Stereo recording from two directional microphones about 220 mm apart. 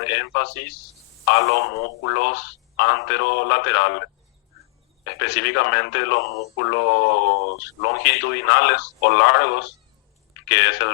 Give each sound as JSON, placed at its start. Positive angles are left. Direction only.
{"t": 0.0, "sound": "speech", "side_deg": 55}